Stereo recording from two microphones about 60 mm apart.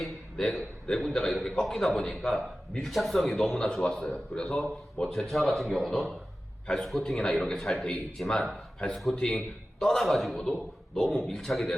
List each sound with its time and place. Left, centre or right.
0.0 s a man's voice: centre